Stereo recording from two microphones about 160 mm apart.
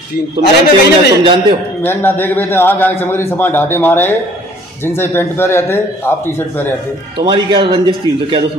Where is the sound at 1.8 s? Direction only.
15° left (ahead or behind).